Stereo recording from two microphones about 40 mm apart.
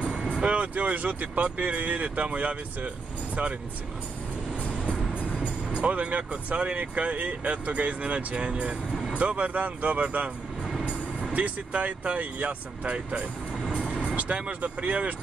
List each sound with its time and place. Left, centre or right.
0.0 s vehicle: right
0.4 s speech: right
5.8 s speech: right
11.3 s speech: right